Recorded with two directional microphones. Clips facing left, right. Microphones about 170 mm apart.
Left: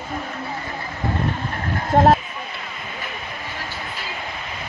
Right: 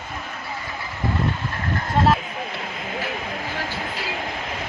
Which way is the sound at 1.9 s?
55° left (ahead or behind).